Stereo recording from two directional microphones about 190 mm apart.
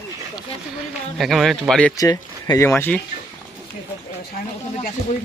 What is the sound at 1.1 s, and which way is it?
Speech, centre (ahead or behind).